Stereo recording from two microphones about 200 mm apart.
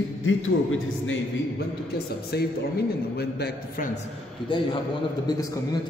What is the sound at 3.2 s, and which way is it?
Speech, 50° left (ahead or behind).